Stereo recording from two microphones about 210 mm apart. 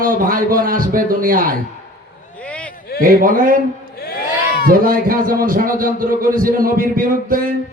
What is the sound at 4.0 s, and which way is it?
Crowd, 45° left (ahead or behind).